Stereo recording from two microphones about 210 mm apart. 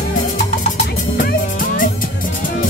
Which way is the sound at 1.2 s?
40° left (ahead or behind).